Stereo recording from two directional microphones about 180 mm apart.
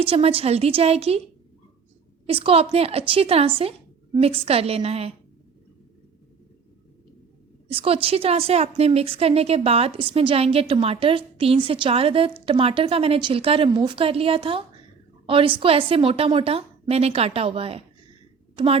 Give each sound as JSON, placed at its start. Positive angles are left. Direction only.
{"t": 0.0, "sound": "a woman's voice", "side_deg": -30}
{"t": 2.2, "sound": "a woman's voice", "side_deg": -30}
{"t": 7.7, "sound": "a woman's voice", "side_deg": -30}